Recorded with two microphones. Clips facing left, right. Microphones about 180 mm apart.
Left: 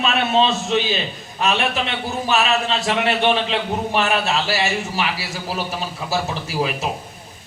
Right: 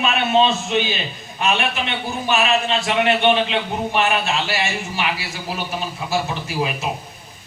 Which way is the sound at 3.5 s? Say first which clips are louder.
Even; 35° left (ahead or behind).